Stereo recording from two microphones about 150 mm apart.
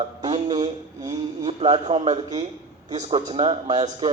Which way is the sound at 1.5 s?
40° right (ahead or behind).